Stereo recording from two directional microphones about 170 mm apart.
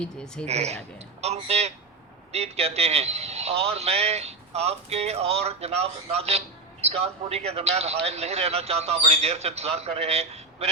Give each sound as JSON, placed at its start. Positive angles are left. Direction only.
{"t": 0.4, "sound": "a man's voice", "side_deg": -40}